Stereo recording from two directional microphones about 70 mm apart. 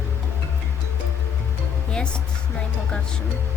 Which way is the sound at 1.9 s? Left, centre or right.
Centre.